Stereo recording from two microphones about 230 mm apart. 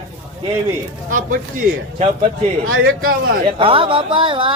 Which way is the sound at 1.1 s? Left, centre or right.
Right.